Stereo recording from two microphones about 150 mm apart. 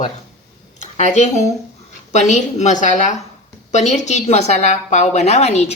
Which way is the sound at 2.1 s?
50° left (ahead or behind).